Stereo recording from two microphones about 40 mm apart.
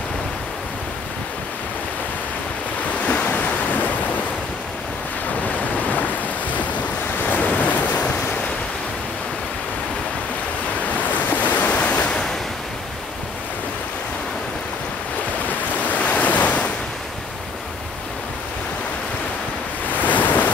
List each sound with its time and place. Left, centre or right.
2.9 s waves: left
5.4 s waves: left
7.2 s waves: left
7.9 s waves: left
11.4 s waves: left
15.9 s waves: left
20.0 s waves: left